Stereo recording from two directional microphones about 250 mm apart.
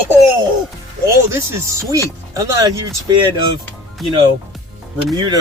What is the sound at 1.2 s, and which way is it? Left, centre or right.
Speech, centre.